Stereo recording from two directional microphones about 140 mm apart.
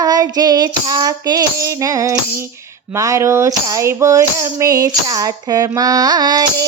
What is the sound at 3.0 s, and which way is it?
Music, 20° right (ahead or behind).